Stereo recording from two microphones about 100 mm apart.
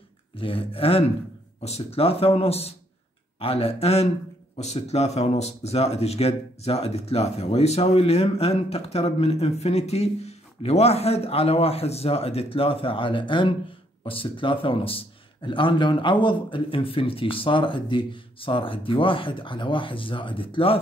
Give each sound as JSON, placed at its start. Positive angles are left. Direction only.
{"t": 0.4, "sound": "speech", "side_deg": 65}
{"t": 1.6, "sound": "speech", "side_deg": 85}
{"t": 3.3, "sound": "a man's voice", "side_deg": 75}